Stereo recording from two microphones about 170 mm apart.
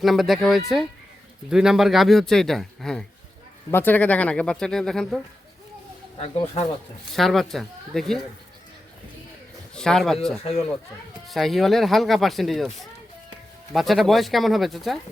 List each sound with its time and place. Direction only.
0.0 s speech: centre (ahead or behind)
6.1 s speech: 35° left (ahead or behind)
7.1 s speech: centre (ahead or behind)
9.7 s speech: 5° left (ahead or behind)
11.3 s speech: centre (ahead or behind)